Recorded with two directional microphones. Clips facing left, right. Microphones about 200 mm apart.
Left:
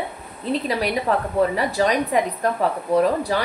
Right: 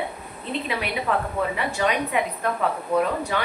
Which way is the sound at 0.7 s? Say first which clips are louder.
Left 2 dB; 40° left (ahead or behind).